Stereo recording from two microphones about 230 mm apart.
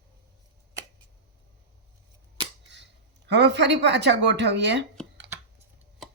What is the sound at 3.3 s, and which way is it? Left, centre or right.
Speech, right.